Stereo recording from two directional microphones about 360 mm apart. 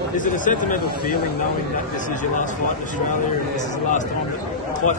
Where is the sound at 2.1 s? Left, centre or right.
Left.